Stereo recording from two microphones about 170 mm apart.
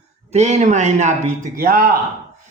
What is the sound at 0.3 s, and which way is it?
A man's voice, 40° right (ahead or behind).